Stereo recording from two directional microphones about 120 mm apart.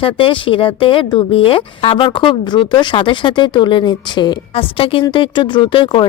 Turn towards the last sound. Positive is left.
turn(degrees=45)  # may be behind; listen again after turning